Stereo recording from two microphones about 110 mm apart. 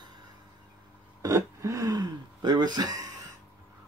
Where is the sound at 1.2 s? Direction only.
30° right (ahead or behind).